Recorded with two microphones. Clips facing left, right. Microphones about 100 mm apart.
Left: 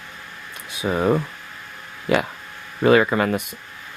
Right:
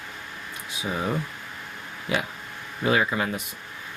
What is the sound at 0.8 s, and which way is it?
Speech, 60° left (ahead or behind).